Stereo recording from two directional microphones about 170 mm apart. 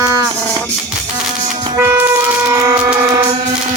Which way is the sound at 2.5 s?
20° right (ahead or behind).